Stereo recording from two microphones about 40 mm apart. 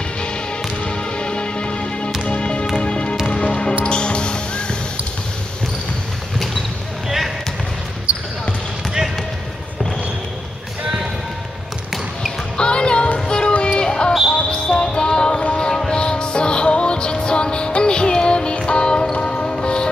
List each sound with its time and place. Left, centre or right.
0.8 s music: left
12.5 s music: left